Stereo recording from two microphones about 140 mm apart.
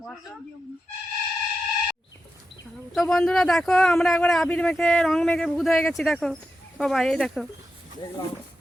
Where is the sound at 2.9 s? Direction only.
5° left (ahead or behind).